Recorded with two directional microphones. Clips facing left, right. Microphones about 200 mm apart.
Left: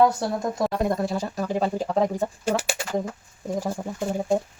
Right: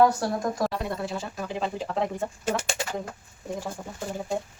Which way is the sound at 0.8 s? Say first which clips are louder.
Left 7 dB; 45° left (ahead or behind).